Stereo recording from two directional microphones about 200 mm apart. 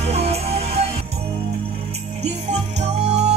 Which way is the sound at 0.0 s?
30° right (ahead or behind).